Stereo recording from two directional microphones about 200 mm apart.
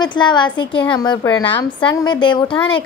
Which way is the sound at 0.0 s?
20° left (ahead or behind).